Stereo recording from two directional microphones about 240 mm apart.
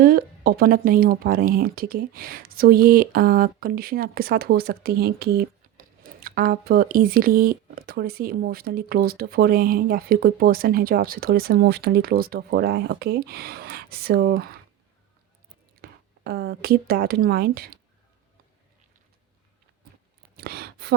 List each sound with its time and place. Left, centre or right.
0.0 s speech: right
15.8 s speech: right
20.3 s a sound: right